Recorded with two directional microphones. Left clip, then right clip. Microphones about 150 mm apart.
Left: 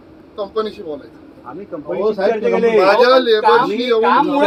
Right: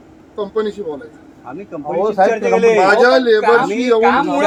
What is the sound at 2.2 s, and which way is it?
A man's voice, 40° right (ahead or behind).